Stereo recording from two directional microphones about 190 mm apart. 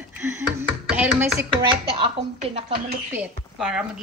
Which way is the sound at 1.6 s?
30° right (ahead or behind).